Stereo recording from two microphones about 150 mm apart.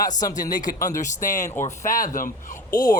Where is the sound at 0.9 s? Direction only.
60° left (ahead or behind).